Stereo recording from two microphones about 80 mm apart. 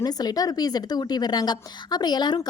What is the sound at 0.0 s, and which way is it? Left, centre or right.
A woman's voice, left.